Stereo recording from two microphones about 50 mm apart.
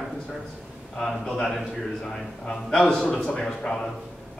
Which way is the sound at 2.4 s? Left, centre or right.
Centre.